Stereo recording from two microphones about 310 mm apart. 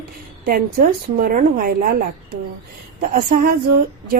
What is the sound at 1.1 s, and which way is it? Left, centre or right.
Speech, right.